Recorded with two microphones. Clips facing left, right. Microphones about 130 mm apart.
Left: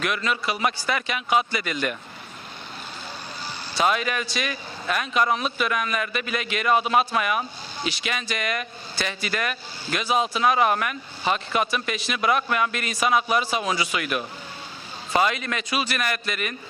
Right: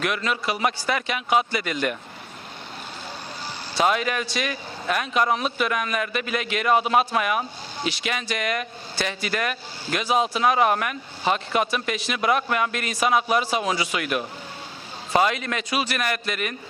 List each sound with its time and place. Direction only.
0.0 s speech: 45° right (ahead or behind)
3.4 s speech: 50° right (ahead or behind)